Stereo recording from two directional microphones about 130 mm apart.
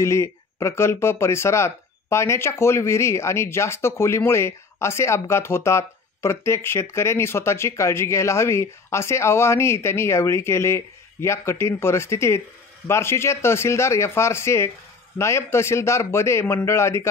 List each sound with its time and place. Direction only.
0.0 s speech: 20° left (ahead or behind)